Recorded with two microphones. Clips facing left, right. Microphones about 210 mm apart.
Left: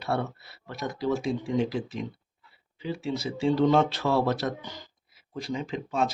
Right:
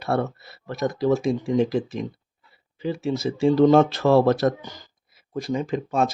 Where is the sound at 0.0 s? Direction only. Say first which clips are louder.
Right 5 dB; 45° right (ahead or behind).